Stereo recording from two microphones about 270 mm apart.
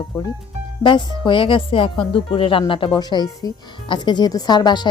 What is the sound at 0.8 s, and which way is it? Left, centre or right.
Speech, centre.